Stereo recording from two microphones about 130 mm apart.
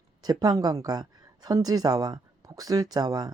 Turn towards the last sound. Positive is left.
turn(degrees=-30)  # may be behind; listen again after turning